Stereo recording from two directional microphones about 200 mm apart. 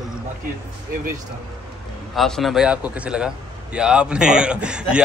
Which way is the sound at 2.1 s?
Centre (ahead or behind).